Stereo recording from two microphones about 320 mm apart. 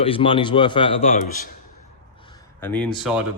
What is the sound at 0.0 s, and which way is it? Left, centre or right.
Speech, centre.